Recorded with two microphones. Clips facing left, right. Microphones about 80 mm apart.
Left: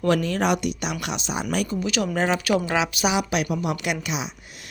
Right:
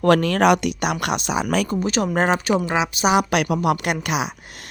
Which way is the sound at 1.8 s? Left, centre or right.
Right.